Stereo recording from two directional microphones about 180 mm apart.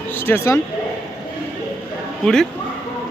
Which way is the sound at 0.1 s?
10° left (ahead or behind).